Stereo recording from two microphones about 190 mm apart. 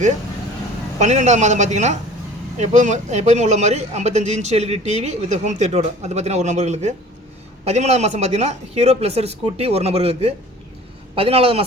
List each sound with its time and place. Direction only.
0.9 s a man's voice: 35° right (ahead or behind)